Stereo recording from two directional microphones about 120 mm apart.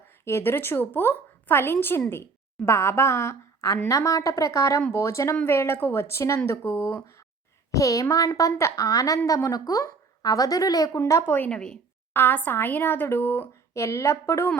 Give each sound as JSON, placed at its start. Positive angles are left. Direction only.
{"t": 0.3, "sound": "a woman's voice", "side_deg": 20}